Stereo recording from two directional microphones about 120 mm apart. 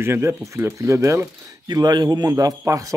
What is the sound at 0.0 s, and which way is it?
Speech, 20° right (ahead or behind).